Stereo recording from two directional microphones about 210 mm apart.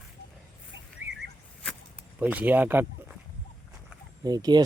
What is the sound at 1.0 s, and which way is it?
Arrow, 10° right (ahead or behind).